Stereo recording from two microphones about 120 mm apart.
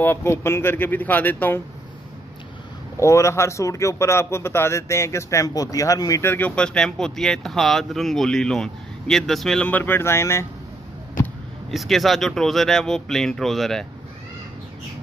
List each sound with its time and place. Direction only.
0.0 s speech: 20° left (ahead or behind)
3.0 s speech: 25° left (ahead or behind)
6.3 s speech: 10° left (ahead or behind)
11.7 s speech: centre (ahead or behind)